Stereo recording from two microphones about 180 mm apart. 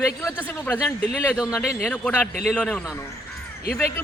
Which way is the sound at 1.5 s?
5° right (ahead or behind).